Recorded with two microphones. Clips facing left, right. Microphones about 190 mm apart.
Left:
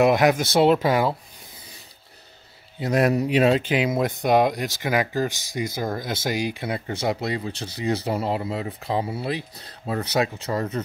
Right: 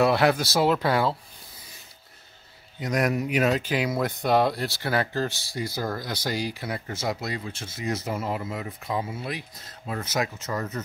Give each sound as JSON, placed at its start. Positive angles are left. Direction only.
{"t": 0.0, "sound": "speech", "side_deg": 15}
{"t": 2.8, "sound": "speech", "side_deg": 30}